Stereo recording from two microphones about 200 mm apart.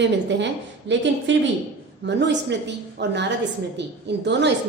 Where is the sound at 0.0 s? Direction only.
60° right (ahead or behind).